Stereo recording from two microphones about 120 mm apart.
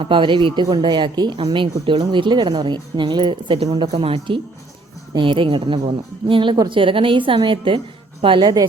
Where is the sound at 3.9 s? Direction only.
55° right (ahead or behind).